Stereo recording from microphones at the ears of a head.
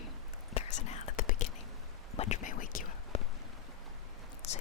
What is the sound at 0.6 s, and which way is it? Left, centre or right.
Whispering, left.